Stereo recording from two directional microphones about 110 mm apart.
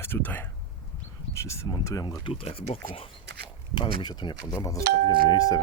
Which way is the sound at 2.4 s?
65° left (ahead or behind).